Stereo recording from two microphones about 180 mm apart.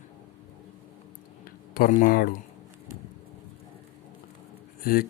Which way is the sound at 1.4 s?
50° left (ahead or behind).